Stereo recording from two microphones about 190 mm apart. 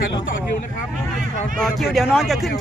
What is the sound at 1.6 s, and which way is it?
Speech, centre (ahead or behind).